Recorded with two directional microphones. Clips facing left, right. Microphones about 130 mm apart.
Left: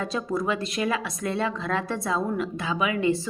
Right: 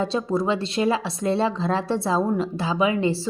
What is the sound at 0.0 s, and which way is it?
A woman's voice, 30° right (ahead or behind).